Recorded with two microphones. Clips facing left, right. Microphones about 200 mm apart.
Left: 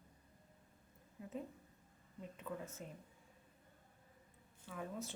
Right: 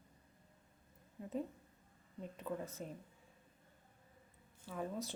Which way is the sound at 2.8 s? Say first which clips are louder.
Right 5 dB; 40° right (ahead or behind).